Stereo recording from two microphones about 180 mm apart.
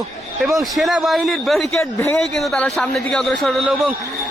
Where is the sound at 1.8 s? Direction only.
15° left (ahead or behind).